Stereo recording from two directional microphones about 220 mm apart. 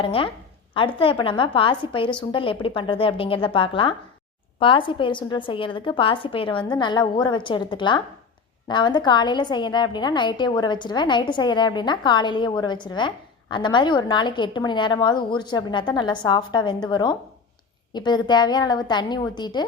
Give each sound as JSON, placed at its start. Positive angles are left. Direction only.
{"t": 0.0, "sound": "a woman's voice", "side_deg": 25}